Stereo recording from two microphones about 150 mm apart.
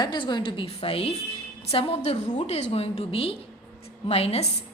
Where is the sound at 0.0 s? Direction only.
30° left (ahead or behind).